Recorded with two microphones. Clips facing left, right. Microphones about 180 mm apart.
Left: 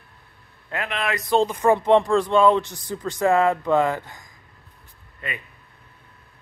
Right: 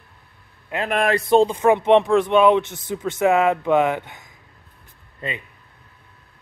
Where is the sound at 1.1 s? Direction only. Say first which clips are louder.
Right 3 dB; 25° right (ahead or behind).